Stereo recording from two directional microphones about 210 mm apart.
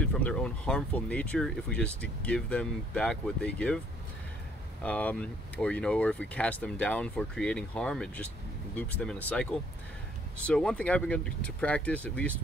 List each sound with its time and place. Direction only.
0.0 s speech: 5° left (ahead or behind)
4.8 s speech: 5° left (ahead or behind)